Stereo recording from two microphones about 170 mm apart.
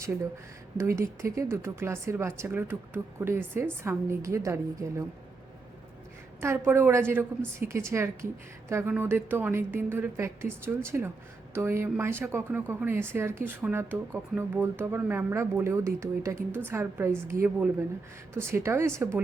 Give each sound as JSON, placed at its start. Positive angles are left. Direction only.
{"t": 0.8, "sound": "speech", "side_deg": -15}
{"t": 6.4, "sound": "speech", "side_deg": -15}